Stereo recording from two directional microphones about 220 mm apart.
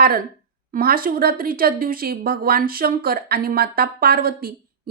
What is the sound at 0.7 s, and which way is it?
Speech, 40° right (ahead or behind).